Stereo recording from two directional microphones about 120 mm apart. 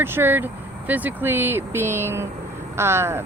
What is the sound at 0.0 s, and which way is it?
Speech, 20° right (ahead or behind).